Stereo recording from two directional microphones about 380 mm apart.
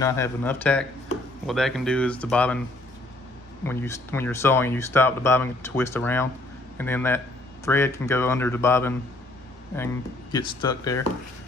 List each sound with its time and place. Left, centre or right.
0.0 s speech: centre
3.6 s speech: centre
10.3 s speech: centre